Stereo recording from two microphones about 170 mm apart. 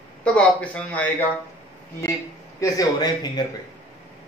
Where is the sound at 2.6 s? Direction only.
20° left (ahead or behind).